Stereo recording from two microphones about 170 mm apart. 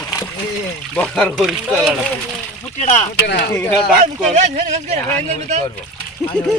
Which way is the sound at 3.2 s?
85° left.